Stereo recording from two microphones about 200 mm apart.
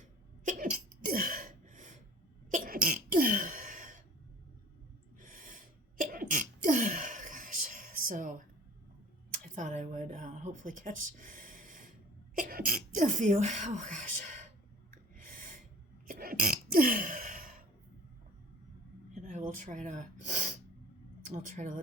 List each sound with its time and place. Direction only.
0.4 s sneeze: 45° right (ahead or behind)
5.2 s sneeze: 40° right (ahead or behind)
9.3 s a sound: 35° right (ahead or behind)
12.3 s speech: 45° right (ahead or behind)
14.8 s gasp: 40° right (ahead or behind)
16.0 s burping: 45° right (ahead or behind)
19.2 s speech: 40° right (ahead or behind)